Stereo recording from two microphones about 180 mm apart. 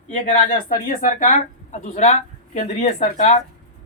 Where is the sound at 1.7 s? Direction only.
40° left (ahead or behind).